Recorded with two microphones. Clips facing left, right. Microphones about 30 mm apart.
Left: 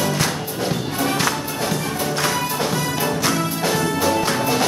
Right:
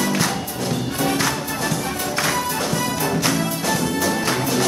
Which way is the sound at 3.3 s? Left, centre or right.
Centre.